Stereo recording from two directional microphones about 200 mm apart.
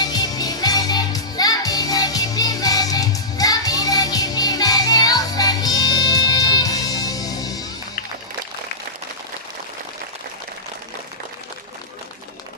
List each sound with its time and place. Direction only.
0.0 s music: 20° left (ahead or behind)